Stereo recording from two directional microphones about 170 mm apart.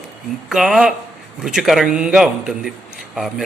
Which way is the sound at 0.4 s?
Centre (ahead or behind).